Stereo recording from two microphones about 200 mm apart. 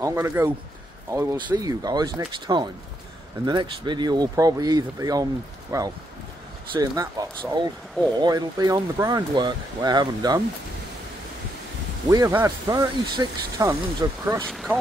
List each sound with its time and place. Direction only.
0.0 s speech: 15° right (ahead or behind)
12.1 s speech: 15° right (ahead or behind)
14.4 s speech: centre (ahead or behind)